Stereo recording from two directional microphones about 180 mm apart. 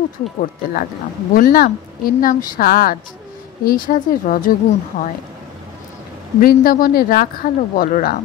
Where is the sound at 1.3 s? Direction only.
55° left (ahead or behind).